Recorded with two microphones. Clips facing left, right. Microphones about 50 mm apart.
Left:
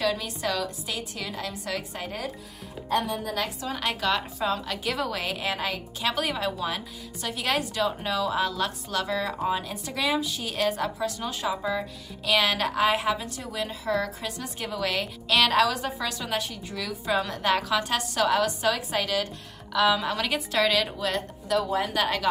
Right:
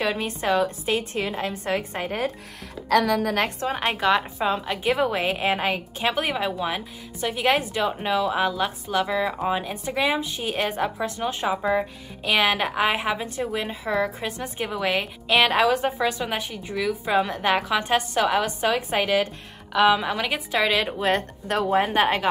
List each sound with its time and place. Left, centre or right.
0.0 s a woman's voice: right
2.9 s a woman's voice: right
3.3 s a woman's voice: right
3.7 s a woman's voice: right
21.0 s a woman's voice: right